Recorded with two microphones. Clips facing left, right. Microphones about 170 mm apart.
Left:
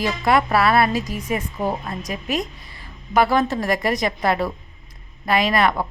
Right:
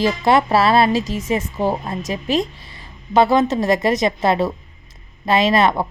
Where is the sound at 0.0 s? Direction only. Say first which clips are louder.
Right 3 dB; 25° right (ahead or behind).